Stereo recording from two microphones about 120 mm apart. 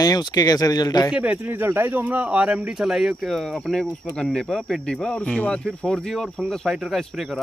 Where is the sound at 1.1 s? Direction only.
10° right (ahead or behind).